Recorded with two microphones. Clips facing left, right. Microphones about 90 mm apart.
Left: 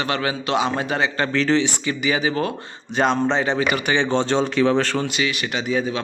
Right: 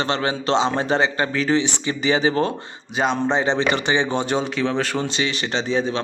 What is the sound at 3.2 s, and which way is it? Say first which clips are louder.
Speech: even; 20° right (ahead or behind).